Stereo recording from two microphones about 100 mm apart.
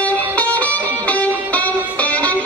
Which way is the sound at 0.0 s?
15° left (ahead or behind).